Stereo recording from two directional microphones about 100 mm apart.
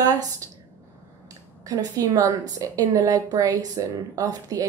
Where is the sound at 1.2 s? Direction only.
40° right (ahead or behind).